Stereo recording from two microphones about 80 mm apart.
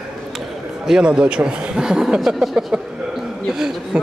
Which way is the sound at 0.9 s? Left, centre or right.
Centre.